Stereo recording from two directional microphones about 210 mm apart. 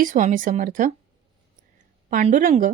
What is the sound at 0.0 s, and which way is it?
Speech, 40° right (ahead or behind).